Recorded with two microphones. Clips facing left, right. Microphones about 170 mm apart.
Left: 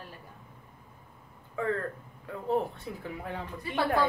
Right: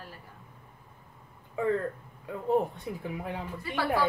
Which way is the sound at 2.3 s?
15° right (ahead or behind).